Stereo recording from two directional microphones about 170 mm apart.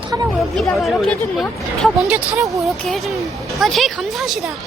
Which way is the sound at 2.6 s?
Centre (ahead or behind).